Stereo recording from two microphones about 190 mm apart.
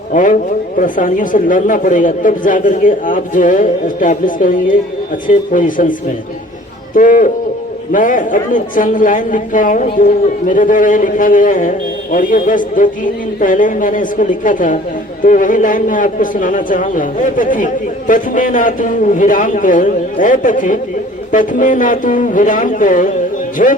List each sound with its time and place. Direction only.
0.1 s a woman's voice: 45° left (ahead or behind)
6.9 s a woman's voice: 45° left (ahead or behind)